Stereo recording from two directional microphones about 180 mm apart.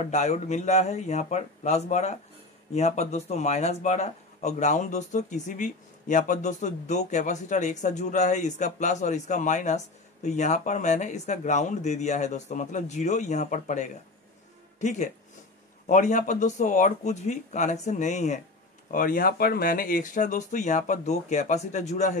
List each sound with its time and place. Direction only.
0.1 s speech: 40° left (ahead or behind)
18.9 s speech: 50° left (ahead or behind)